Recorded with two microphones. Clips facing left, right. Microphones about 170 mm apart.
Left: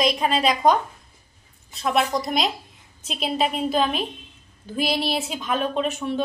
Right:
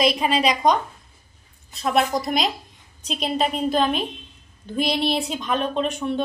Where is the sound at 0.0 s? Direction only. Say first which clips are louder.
Right 1 dB; centre (ahead or behind).